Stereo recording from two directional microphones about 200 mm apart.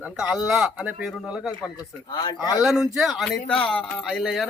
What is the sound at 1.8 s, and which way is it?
Speech, 20° left (ahead or behind).